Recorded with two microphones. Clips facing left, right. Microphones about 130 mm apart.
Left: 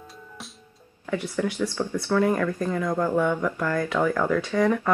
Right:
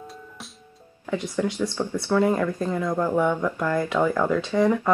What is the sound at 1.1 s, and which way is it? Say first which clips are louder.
Speech: right 1 dB; 15° right (ahead or behind).